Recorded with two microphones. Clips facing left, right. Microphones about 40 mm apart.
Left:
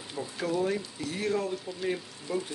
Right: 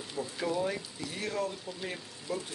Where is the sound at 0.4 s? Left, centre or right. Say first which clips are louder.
Left 4 dB; centre.